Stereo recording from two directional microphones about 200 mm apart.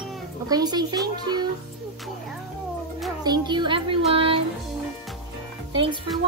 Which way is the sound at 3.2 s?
20° right (ahead or behind).